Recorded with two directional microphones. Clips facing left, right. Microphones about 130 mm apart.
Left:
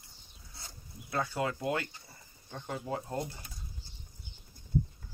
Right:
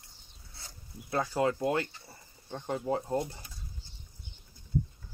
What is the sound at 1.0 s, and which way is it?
Speech, 30° right (ahead or behind).